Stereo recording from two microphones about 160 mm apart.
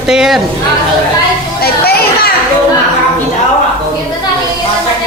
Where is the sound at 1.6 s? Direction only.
75° left (ahead or behind).